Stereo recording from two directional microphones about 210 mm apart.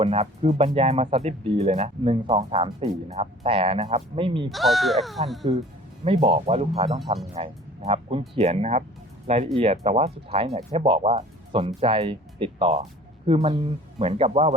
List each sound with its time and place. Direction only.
0.0 s speech: 30° right (ahead or behind)
4.4 s speech: centre (ahead or behind)
6.1 s speech: 25° right (ahead or behind)